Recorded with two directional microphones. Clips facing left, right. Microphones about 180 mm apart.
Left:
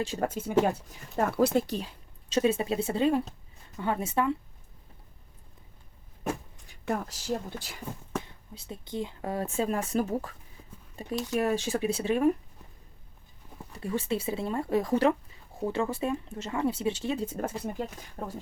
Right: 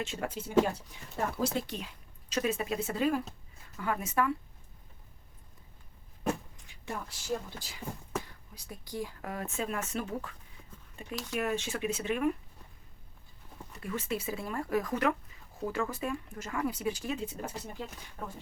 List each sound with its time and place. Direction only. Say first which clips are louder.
0.0 s speech: left 6 dB; 35° left (ahead or behind); by 1.6 s 60° left (ahead or behind)
1.6 s speech: left 6 dB; 35° left (ahead or behind)
6.8 s speech: left 8 dB; 55° left (ahead or behind)
8.2 s speech: left 4 dB; 25° left (ahead or behind)
13.7 s speech: left 5 dB; 30° left (ahead or behind)
17.2 s speech: left 7 dB; 50° left (ahead or behind)
18.2 s speech: left 4 dB; 35° left (ahead or behind)